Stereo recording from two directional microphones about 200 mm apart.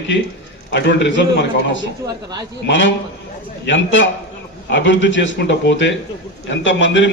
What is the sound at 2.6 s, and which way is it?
A man's voice, 65° left (ahead or behind).